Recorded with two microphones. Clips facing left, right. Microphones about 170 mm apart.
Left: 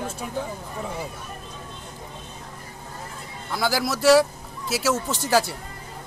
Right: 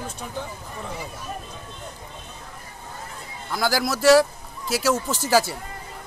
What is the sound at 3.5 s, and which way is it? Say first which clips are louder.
A man's voice: right 1 dB; centre (ahead or behind).